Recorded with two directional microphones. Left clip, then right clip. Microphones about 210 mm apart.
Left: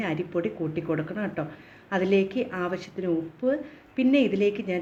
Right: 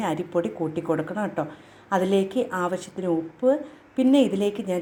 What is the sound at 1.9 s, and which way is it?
Speech, 15° left (ahead or behind).